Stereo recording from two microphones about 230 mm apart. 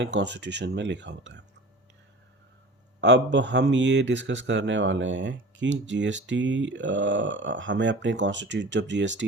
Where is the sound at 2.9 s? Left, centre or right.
Right.